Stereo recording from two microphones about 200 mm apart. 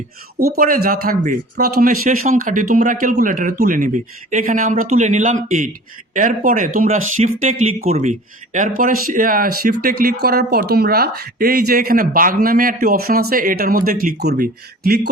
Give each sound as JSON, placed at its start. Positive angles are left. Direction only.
{"t": 0.3, "sound": "speech", "side_deg": -50}